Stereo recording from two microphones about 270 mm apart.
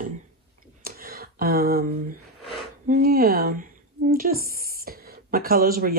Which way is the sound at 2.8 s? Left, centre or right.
Right.